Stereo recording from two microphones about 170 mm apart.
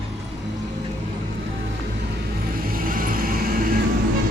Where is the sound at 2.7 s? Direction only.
55° right (ahead or behind).